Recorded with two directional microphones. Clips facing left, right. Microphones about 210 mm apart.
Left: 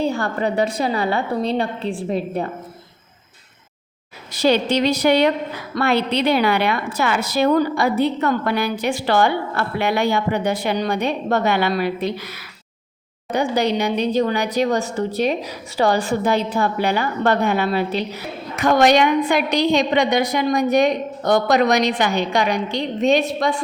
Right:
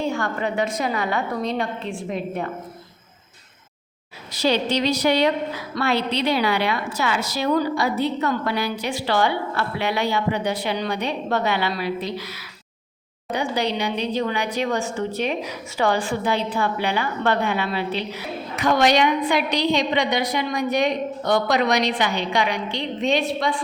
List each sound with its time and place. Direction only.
0.0 s a woman's voice: 35° left (ahead or behind)
4.3 s speech: 50° left (ahead or behind)